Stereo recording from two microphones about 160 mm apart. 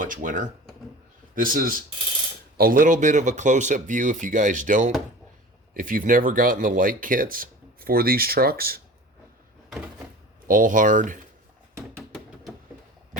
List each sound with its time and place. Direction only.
0.0 s speech: 55° right (ahead or behind)
10.4 s speech: 55° right (ahead or behind)